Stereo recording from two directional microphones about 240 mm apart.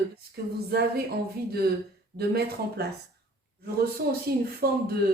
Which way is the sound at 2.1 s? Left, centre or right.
Right.